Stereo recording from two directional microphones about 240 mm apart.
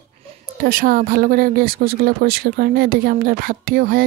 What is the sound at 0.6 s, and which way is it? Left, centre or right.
Speech, right.